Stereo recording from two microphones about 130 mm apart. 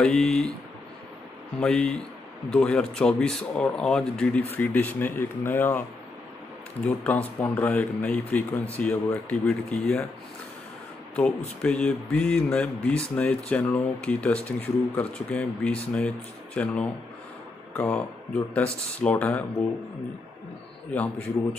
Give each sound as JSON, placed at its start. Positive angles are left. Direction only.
{"t": 0.0, "sound": "speech", "side_deg": 5}
{"t": 1.6, "sound": "speech", "side_deg": 5}
{"t": 6.9, "sound": "speech", "side_deg": 10}
{"t": 11.1, "sound": "speech", "side_deg": 10}
{"t": 20.9, "sound": "speech", "side_deg": 10}